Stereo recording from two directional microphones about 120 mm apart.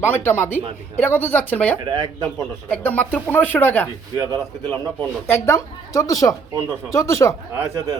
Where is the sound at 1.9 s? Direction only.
35° right (ahead or behind).